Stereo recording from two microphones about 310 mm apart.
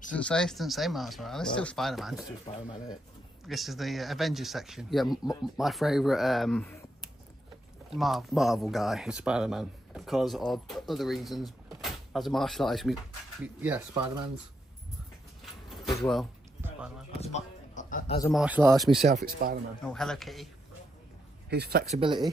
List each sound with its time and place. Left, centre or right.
0.1 s speech: centre
2.1 s speech: centre
3.4 s speech: centre
16.0 s a sound: centre
17.2 s a sound: left
18.3 s speech: centre
19.0 s speech: right
19.8 s speech: centre
21.5 s speech: right